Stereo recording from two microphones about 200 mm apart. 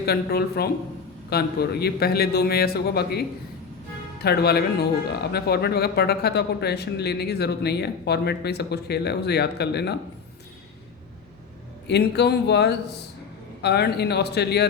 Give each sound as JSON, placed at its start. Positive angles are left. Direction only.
{"t": 0.0, "sound": "speech", "side_deg": 50}
{"t": 11.9, "sound": "speech", "side_deg": 55}